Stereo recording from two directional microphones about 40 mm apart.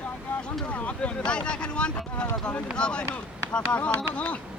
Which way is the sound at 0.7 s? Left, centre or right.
Left.